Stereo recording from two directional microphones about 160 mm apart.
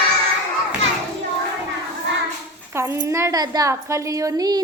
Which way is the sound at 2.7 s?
15° right (ahead or behind).